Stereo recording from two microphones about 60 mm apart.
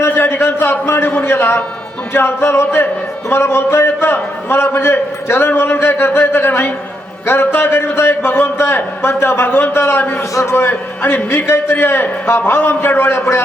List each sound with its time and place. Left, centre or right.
0.0 s a sound: left
2.1 s music: left
7.3 s a man's voice: left
10.3 s music: left